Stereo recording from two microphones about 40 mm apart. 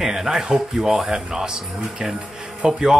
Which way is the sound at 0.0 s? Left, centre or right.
Centre.